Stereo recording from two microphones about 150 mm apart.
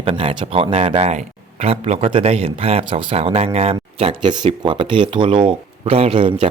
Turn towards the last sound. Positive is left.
turn(degrees=-40)  # may be behind; listen again after turning